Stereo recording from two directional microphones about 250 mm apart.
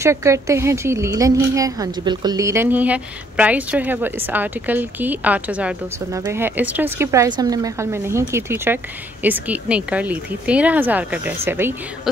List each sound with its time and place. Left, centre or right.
0.0 s a woman's voice: centre